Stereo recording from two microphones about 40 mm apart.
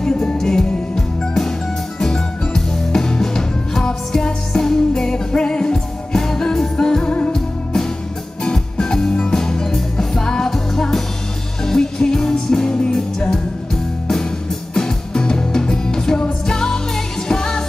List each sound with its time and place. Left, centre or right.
0.0 s music: centre
8.5 s music: centre
14.7 s music: centre